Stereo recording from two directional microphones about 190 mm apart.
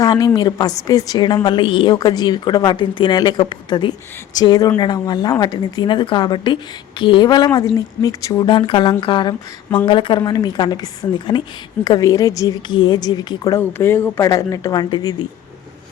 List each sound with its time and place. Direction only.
0.0 s a woman's voice: 20° left (ahead or behind)
11.9 s a woman's voice: 20° left (ahead or behind)